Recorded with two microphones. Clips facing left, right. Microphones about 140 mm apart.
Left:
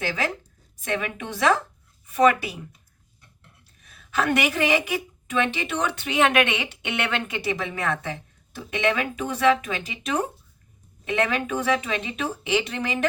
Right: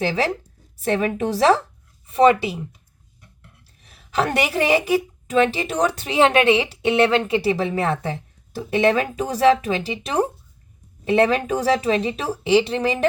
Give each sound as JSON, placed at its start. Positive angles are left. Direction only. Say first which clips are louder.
{"t": 0.0, "sound": "a woman's voice", "louder": "right 6 dB", "side_deg": -30}
{"t": 3.8, "sound": "a woman's voice", "louder": "right 4 dB", "side_deg": -30}